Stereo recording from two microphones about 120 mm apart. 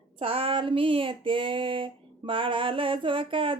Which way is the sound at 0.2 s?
50° right (ahead or behind).